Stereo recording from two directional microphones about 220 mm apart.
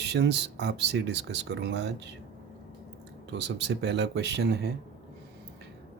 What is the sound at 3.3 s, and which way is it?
Speech, 50° right (ahead or behind).